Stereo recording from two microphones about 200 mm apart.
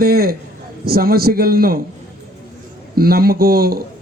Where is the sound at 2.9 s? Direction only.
50° right (ahead or behind).